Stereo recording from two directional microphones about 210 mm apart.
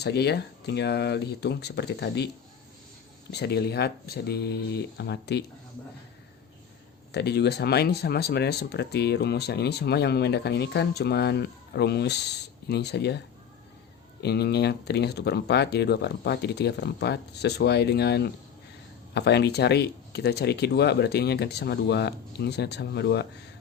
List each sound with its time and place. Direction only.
0.0 s speech: 50° left (ahead or behind)
3.3 s speech: 50° left (ahead or behind)
7.1 s speech: 50° left (ahead or behind)